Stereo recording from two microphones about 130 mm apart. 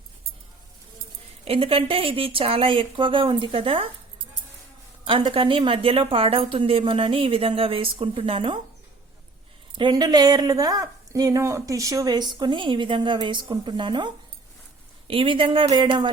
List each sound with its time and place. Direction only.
1.5 s speech: 45° right (ahead or behind)
5.0 s speech: 40° right (ahead or behind)
9.7 s a woman's voice: 35° right (ahead or behind)